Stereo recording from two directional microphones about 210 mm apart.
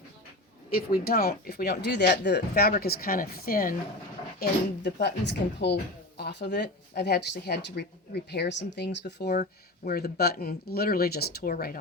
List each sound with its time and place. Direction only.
0.7 s speech: 45° left (ahead or behind)